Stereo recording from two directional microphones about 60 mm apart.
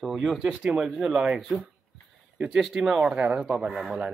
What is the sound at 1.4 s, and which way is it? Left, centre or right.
Speech, centre.